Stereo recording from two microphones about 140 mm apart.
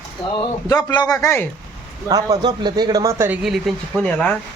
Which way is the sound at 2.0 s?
30° right (ahead or behind).